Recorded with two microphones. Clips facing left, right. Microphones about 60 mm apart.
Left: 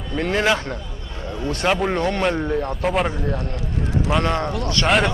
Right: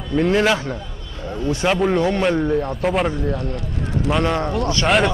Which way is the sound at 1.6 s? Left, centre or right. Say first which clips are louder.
Right 2 dB; centre.